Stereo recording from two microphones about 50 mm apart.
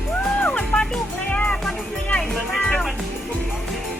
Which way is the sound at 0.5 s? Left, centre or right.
Centre.